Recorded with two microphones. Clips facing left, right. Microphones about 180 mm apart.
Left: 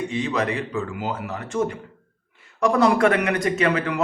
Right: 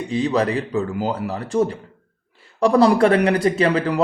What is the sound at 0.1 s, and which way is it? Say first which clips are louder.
Speech: right 5 dB; 35° right (ahead or behind).